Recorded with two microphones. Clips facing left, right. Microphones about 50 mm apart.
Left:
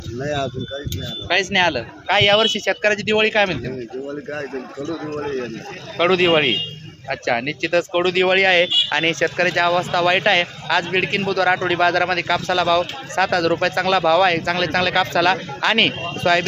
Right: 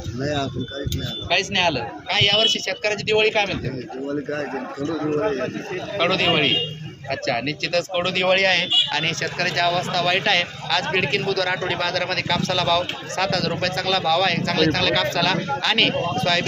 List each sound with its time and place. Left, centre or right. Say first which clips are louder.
0.2 s speech: left 1 dB; left
4.9 s a man's voice: right 5 dB; centre
6.0 s speech: left 4 dB; centre
7.9 s a man's voice: left 3 dB; centre